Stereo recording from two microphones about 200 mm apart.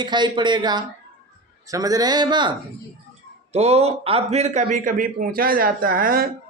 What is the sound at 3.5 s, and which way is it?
A man's voice, 30° right (ahead or behind).